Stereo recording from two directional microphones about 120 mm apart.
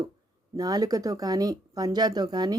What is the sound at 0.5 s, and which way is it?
Speech, 35° right (ahead or behind).